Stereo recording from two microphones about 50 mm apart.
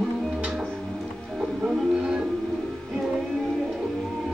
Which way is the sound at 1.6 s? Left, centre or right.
Centre.